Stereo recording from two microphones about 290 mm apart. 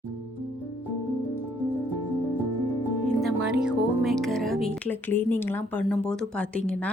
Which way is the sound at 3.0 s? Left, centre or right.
Centre.